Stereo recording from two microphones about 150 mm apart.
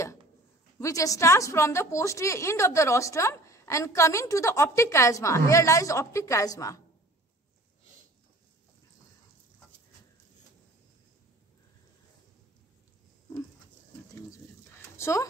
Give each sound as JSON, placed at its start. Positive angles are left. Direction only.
{"t": 0.7, "sound": "a woman's voice", "side_deg": 20}
{"t": 15.0, "sound": "speech", "side_deg": 20}